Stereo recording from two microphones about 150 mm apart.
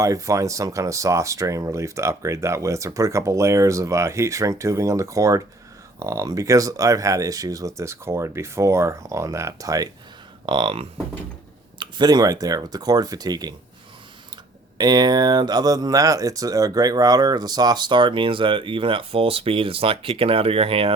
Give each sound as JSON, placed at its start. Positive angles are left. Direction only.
{"t": 0.0, "sound": "speech", "side_deg": -20}
{"t": 14.8, "sound": "speech", "side_deg": -25}